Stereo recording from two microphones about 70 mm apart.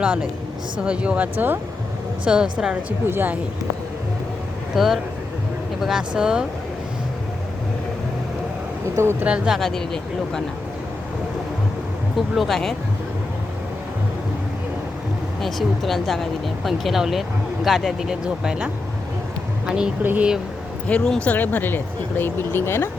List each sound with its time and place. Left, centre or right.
0.0 s speech: centre
2.2 s speech: centre
3.1 s speech: right
4.7 s speech: centre
9.2 s speech: centre
9.6 s speech: centre
12.3 s speech: centre
15.4 s speech: centre
20.0 s speech: right
20.8 s speech: centre; by 22.9 s left